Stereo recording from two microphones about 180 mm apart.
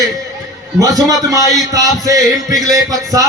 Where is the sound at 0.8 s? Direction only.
20° right (ahead or behind).